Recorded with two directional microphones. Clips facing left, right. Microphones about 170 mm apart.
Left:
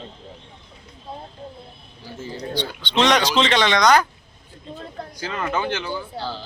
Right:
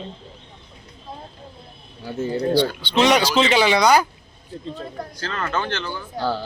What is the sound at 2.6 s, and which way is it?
Speech, 5° right (ahead or behind).